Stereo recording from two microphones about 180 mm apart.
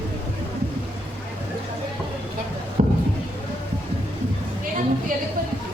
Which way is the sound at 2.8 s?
45° right (ahead or behind).